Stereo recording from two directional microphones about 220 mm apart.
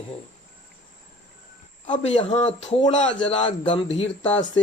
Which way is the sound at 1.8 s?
30° left (ahead or behind).